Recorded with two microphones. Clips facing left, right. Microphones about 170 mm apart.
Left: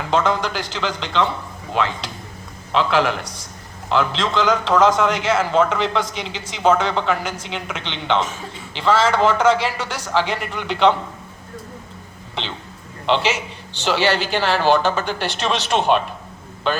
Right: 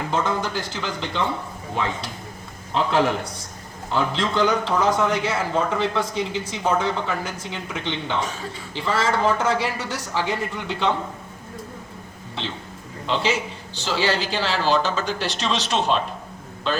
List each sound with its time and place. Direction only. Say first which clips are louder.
0.1 s a man's voice: left 6 dB; 90° left
13.1 s a woman's voice: left 3 dB; 75° left (ahead or behind); by 16.0 s 60° left (ahead or behind)